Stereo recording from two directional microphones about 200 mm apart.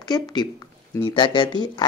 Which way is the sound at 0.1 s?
20° left (ahead or behind).